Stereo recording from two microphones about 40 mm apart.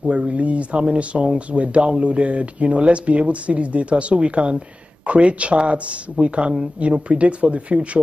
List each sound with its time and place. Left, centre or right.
0.1 s speech: right